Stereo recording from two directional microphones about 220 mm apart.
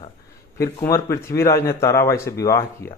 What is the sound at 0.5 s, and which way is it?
Speech, 15° left (ahead or behind).